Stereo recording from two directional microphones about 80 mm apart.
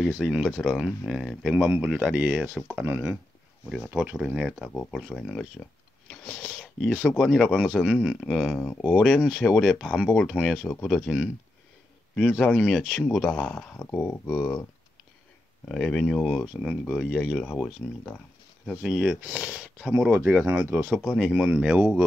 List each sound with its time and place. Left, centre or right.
0.1 s speech: centre
1.5 s speech: centre
3.6 s speech: centre
4.6 s speech: centre
7.6 s speech: centre
8.5 s speech: centre
12.2 s speech: centre
13.7 s speech: left
15.7 s speech: centre
18.7 s speech: centre
20.1 s speech: right
20.9 s speech: centre
21.2 s speech: centre